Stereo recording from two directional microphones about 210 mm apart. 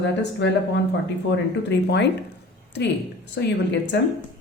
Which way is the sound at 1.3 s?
55° left (ahead or behind).